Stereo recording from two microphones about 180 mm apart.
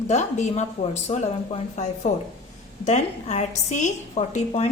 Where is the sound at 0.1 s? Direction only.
40° left (ahead or behind).